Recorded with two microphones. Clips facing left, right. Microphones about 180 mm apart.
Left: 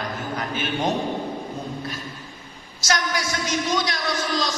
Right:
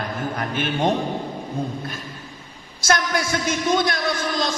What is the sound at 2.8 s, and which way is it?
A man's voice, 55° right (ahead or behind).